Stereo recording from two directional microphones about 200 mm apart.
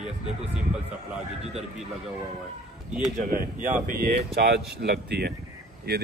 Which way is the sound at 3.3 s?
40° right (ahead or behind).